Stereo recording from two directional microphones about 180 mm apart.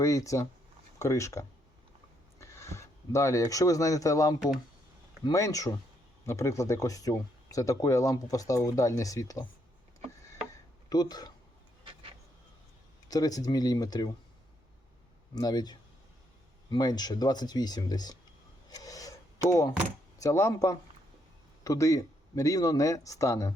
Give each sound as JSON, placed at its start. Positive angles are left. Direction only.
{"t": 0.0, "sound": "speech", "side_deg": 15}
{"t": 10.8, "sound": "speech", "side_deg": 20}
{"t": 13.1, "sound": "speech", "side_deg": 20}
{"t": 15.4, "sound": "speech", "side_deg": 20}
{"t": 18.7, "sound": "a sound", "side_deg": 20}
{"t": 20.1, "sound": "speech", "side_deg": 20}